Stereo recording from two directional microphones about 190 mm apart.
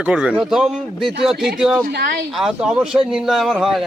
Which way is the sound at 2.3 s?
5° right (ahead or behind).